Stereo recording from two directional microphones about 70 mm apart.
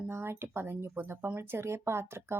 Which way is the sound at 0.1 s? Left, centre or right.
Right.